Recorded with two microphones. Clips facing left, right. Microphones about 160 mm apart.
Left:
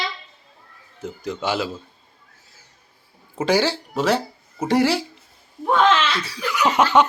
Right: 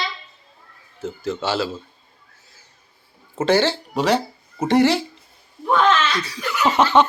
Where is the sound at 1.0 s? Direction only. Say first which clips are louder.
Right 1 dB; 15° left (ahead or behind).